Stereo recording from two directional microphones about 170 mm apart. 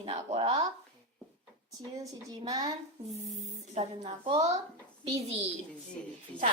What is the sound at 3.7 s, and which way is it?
Speech, 35° right (ahead or behind).